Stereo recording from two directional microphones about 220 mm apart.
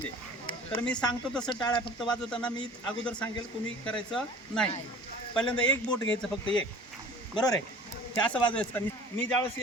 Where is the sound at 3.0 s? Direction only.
5° left (ahead or behind).